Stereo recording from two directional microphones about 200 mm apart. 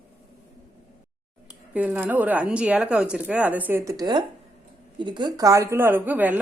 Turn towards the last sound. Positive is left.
turn(degrees=-10)  # may be behind; listen again after turning